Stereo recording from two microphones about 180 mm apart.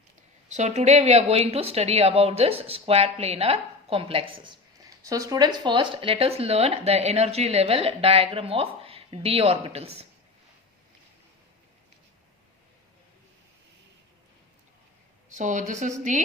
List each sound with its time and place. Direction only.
0.5 s speech: 40° right (ahead or behind)
15.3 s a woman's voice: 45° right (ahead or behind)